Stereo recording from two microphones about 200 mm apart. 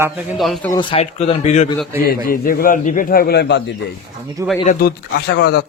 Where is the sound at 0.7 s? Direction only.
25° left (ahead or behind).